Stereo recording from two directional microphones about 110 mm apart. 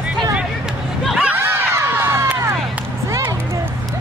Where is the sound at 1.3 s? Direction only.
20° right (ahead or behind).